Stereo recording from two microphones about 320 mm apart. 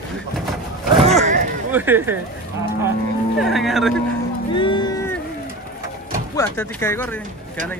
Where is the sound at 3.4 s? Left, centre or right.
Centre.